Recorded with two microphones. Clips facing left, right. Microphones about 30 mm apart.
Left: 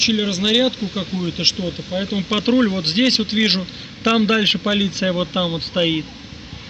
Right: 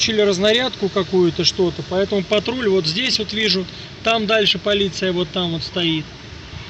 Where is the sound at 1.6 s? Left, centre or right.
Right.